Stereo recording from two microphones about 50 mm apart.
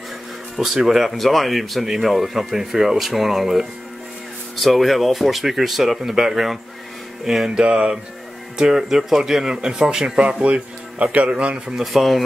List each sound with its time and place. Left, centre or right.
0.6 s speech: centre
7.6 s music: right
8.5 s speech: centre
11.7 s speech: centre